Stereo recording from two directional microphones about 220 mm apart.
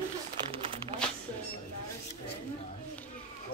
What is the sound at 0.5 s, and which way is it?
Crumpling, 25° right (ahead or behind).